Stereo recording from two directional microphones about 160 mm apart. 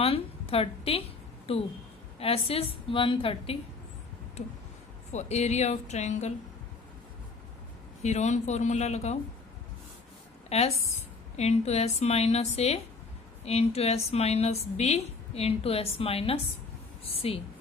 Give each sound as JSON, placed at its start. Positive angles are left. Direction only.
{"t": 0.0, "sound": "a woman's voice", "side_deg": 35}
{"t": 8.0, "sound": "speech", "side_deg": 45}
{"t": 10.5, "sound": "a woman's voice", "side_deg": 40}